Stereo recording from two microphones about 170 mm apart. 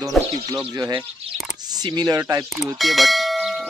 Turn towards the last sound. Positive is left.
turn(degrees=0)  # may be behind; listen again after turning